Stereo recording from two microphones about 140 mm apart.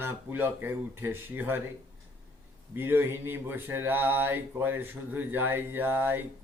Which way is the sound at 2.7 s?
15° right (ahead or behind).